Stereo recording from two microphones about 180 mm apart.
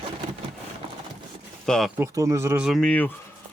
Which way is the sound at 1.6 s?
5° left (ahead or behind).